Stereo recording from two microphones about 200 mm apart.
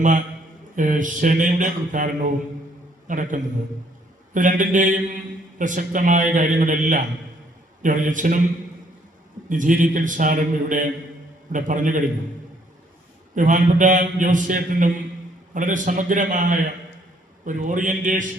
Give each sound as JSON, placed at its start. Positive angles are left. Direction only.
{"t": 0.8, "sound": "a man's voice", "side_deg": -40}
{"t": 9.5, "sound": "a man's voice", "side_deg": -40}
{"t": 13.3, "sound": "a man's voice", "side_deg": -40}